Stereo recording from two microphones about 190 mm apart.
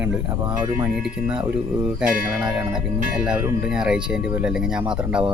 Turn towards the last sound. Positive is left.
turn(degrees=-5)  # may be behind; listen again after turning